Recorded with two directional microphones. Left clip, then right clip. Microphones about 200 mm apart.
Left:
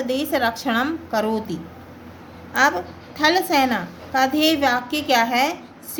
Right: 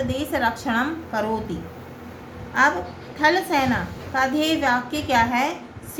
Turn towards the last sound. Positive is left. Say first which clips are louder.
# left 2 dB
turn(degrees=50)  # may be behind; listen again after turning